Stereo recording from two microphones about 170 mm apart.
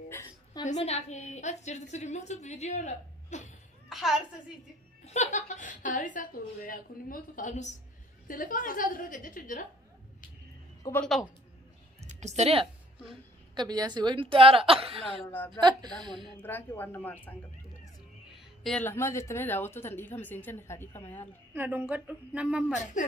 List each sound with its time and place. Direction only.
0.7 s a woman's voice: 40° left (ahead or behind)
3.9 s a sound: centre (ahead or behind)
5.0 s a woman's voice: 40° left (ahead or behind)
10.8 s a woman's voice: 15° left (ahead or behind)
12.0 s a sound: 40° right (ahead or behind)
13.6 s a woman's voice: 25° right (ahead or behind)
15.2 s a woman's voice: 15° left (ahead or behind)
16.0 s speech: 25° right (ahead or behind)
16.4 s a woman's voice: 10° left (ahead or behind)
18.3 s music: centre (ahead or behind)
18.9 s a woman's voice: 15° left (ahead or behind)
21.5 s a woman's voice: 10° right (ahead or behind)
22.7 s a woman's voice: 45° left (ahead or behind)